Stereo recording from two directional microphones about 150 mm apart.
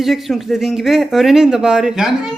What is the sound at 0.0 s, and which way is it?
Speech, centre (ahead or behind).